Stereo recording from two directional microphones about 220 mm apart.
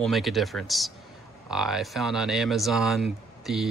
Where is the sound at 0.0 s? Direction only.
Centre (ahead or behind).